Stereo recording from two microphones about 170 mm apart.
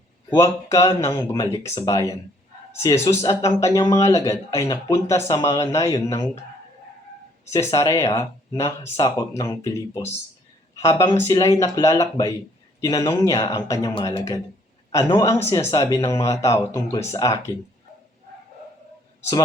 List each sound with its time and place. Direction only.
0.3 s speech: 15° left (ahead or behind)
1.6 s speech: 35° left (ahead or behind)
1.9 s speech: 20° left (ahead or behind)
6.1 s speech: 30° left (ahead or behind)
7.4 s speech: 15° left (ahead or behind)